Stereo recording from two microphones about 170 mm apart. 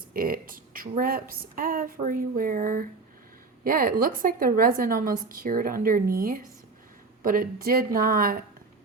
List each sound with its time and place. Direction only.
0.1 s a woman's voice: 60° right (ahead or behind)